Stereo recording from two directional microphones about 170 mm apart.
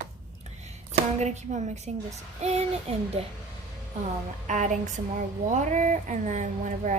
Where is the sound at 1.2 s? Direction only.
45° right (ahead or behind).